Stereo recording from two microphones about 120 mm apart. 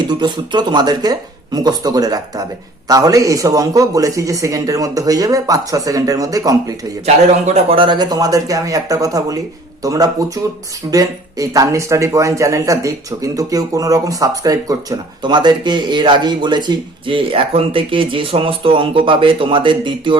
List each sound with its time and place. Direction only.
0.1 s a man's voice: 40° right (ahead or behind)
7.0 s a man's voice: 65° right (ahead or behind)
7.8 s a man's voice: 40° right (ahead or behind)